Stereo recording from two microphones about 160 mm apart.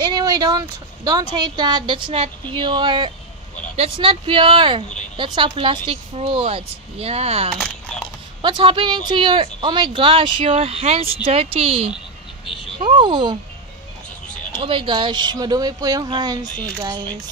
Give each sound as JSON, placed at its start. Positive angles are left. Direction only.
{"t": 0.0, "sound": "speech", "side_deg": -25}
{"t": 8.4, "sound": "speech", "side_deg": -30}
{"t": 14.6, "sound": "speech", "side_deg": -35}